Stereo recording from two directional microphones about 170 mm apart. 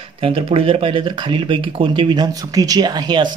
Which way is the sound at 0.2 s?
35° right (ahead or behind).